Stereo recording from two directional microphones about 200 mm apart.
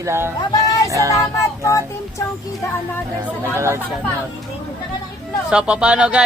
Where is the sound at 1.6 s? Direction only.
15° left (ahead or behind).